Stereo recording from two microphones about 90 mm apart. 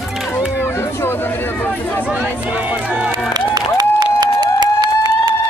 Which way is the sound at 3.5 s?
50° right (ahead or behind).